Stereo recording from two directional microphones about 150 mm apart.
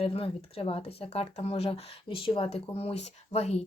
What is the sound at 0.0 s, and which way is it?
Speech, 40° left (ahead or behind).